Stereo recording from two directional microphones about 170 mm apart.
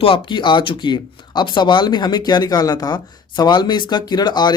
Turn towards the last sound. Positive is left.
turn(degrees=25)  # may be behind; listen again after turning